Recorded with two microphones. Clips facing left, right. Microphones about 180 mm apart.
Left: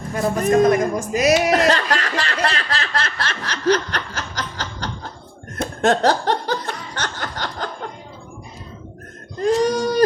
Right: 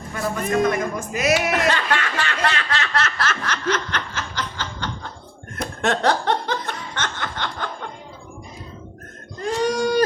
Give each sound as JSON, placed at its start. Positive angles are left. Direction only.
{"t": 0.1, "sound": "speech", "side_deg": 40}
{"t": 5.5, "sound": "snicker", "side_deg": 35}